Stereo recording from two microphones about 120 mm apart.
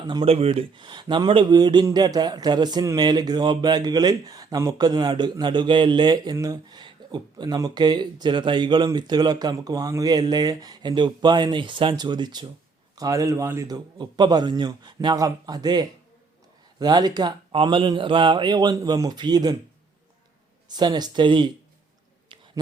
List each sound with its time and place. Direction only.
0.3 s speech: 55° right (ahead or behind); by 19.5 s 35° right (ahead or behind)
20.7 s speech: 35° right (ahead or behind)